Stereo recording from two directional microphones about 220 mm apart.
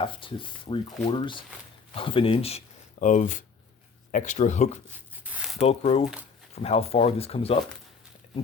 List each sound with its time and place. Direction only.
0.0 s speech: 25° left (ahead or behind)
4.9 s a sound: 5° right (ahead or behind)
5.5 s speech: 30° left (ahead or behind)